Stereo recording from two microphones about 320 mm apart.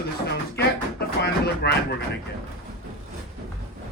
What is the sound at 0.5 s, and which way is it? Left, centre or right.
Music, left.